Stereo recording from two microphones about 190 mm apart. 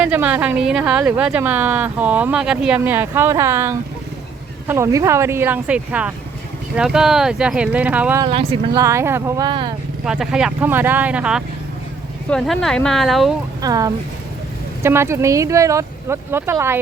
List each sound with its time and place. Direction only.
0.0 s speech: 5° right (ahead or behind)
8.2 s speech: 30° right (ahead or behind)
8.7 s speech: 15° right (ahead or behind)
10.1 s speech: 5° right (ahead or behind)
13.6 s speech: 20° right (ahead or behind)